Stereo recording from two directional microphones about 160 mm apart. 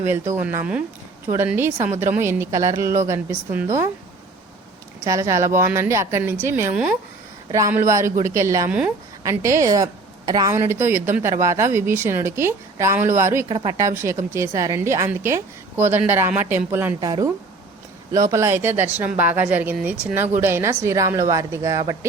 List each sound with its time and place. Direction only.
0.1 s a woman's voice: 15° right (ahead or behind)
5.0 s a woman's voice: 20° right (ahead or behind)
13.5 s a woman's voice: 30° right (ahead or behind)